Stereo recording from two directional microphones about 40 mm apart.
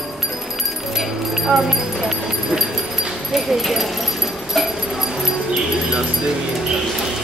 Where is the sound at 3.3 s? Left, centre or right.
Centre.